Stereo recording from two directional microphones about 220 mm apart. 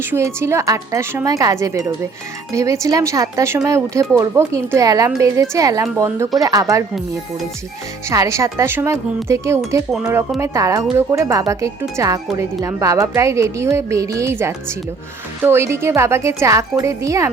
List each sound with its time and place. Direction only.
0.0 s speech: 10° right (ahead or behind)
8.1 s speech: 15° right (ahead or behind)